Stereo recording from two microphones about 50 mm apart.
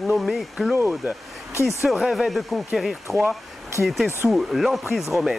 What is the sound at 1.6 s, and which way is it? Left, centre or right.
Speech, left.